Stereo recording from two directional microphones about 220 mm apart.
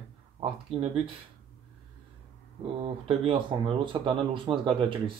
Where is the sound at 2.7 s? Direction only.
25° right (ahead or behind).